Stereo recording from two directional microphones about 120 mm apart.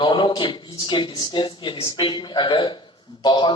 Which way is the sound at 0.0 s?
40° left (ahead or behind).